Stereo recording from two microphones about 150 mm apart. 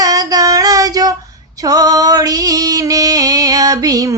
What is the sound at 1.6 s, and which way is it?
Music, 25° right (ahead or behind).